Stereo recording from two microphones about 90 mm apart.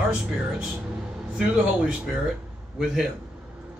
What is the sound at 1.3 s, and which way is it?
A man's voice, 10° right (ahead or behind).